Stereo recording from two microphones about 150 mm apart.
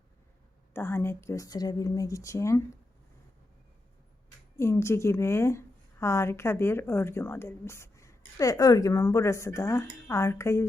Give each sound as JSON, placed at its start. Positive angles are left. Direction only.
{"t": 0.7, "sound": "speech", "side_deg": 15}
{"t": 4.5, "sound": "a woman's voice", "side_deg": 20}